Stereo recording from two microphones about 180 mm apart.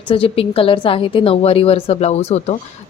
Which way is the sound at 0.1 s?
30° left (ahead or behind).